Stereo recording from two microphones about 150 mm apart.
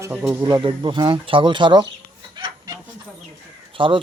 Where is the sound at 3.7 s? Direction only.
35° right (ahead or behind).